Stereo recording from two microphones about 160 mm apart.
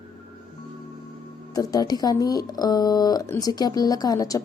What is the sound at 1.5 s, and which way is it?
A woman's voice, 25° left (ahead or behind).